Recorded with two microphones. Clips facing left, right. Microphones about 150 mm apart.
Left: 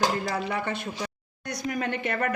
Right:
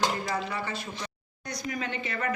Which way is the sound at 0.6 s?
60° left (ahead or behind).